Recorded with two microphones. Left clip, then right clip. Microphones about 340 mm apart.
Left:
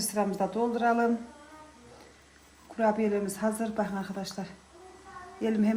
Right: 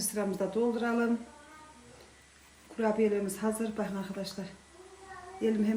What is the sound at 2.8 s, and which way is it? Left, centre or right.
A woman's voice, centre.